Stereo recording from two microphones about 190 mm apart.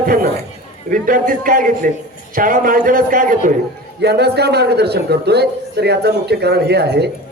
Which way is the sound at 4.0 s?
60° right (ahead or behind).